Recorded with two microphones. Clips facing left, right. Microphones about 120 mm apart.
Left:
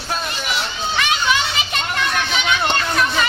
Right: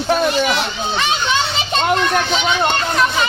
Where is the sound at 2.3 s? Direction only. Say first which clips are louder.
Right 3 dB; 30° right (ahead or behind).